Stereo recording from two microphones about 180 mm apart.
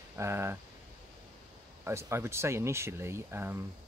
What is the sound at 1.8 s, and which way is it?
Speech, 15° right (ahead or behind).